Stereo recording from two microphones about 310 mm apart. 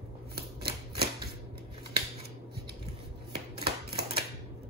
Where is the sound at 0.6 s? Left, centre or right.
Right.